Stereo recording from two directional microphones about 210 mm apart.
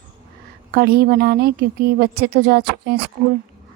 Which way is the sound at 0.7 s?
50° right (ahead or behind).